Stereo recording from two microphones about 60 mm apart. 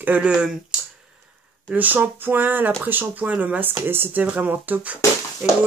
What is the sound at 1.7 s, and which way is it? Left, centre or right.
Speech, right.